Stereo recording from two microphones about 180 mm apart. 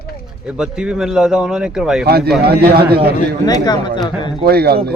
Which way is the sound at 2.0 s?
60° right (ahead or behind).